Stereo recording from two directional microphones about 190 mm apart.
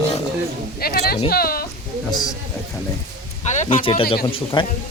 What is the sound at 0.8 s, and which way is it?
Speech, 55° left (ahead or behind).